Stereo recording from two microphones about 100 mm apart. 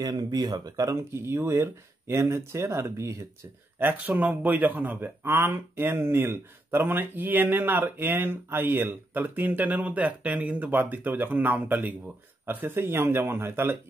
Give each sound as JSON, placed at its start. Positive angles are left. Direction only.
{"t": 0.0, "sound": "speech", "side_deg": -40}
{"t": 3.8, "sound": "speech", "side_deg": -15}